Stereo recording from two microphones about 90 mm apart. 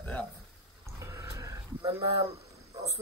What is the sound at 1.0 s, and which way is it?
Sheep, 35° right (ahead or behind).